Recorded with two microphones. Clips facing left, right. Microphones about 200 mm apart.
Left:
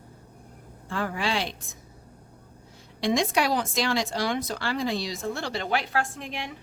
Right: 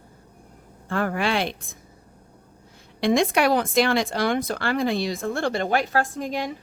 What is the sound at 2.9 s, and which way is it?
A woman's voice, 55° right (ahead or behind).